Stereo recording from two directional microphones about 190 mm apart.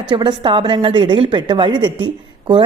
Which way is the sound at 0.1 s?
25° right (ahead or behind).